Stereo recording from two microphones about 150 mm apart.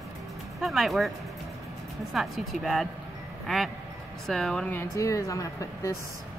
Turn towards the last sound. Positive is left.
turn(degrees=20)  # may be behind; listen again after turning